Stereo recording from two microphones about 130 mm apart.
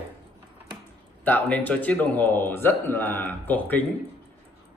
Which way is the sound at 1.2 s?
10° left (ahead or behind).